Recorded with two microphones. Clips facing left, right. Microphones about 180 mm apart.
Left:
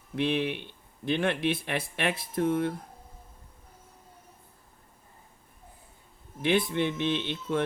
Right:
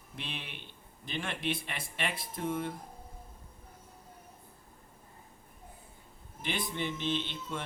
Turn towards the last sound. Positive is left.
turn(degrees=60)  # may be behind; listen again after turning